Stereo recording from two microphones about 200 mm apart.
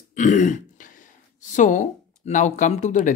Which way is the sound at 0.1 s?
40° left (ahead or behind).